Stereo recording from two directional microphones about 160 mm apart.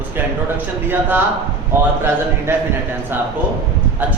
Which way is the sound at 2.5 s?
15° right (ahead or behind).